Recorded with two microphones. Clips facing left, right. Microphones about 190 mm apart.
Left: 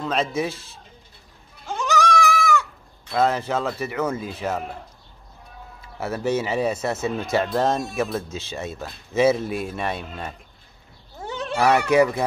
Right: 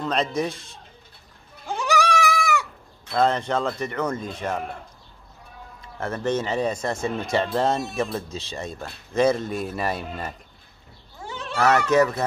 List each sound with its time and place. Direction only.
0.0 s speech: 5° left (ahead or behind)
1.7 s goat: 10° right (ahead or behind)
3.1 s speech: 5° left (ahead or behind)
5.8 s speech: 5° left (ahead or behind)
11.5 s speech: 10° left (ahead or behind)